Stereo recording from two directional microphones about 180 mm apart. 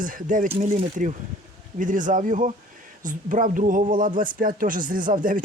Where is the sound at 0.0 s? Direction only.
50° right (ahead or behind).